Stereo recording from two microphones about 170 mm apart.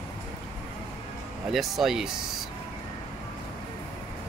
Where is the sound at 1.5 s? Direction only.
Centre (ahead or behind).